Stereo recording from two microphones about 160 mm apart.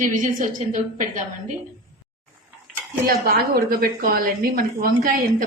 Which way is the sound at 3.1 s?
70° right (ahead or behind).